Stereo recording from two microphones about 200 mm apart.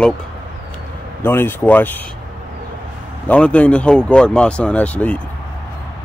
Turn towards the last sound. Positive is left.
turn(degrees=5)  # may be behind; listen again after turning